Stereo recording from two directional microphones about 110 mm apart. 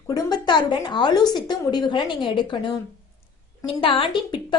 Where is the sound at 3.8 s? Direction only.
55° left (ahead or behind).